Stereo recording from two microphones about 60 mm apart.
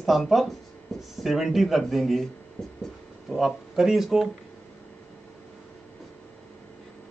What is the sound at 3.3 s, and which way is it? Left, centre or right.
Speech, centre.